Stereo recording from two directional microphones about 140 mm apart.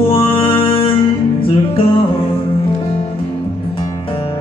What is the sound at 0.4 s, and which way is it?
Music, 40° left (ahead or behind).